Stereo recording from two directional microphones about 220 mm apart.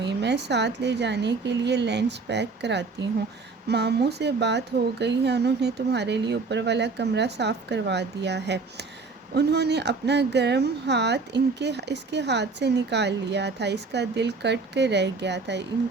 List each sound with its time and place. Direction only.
0.0 s speech: 50° right (ahead or behind)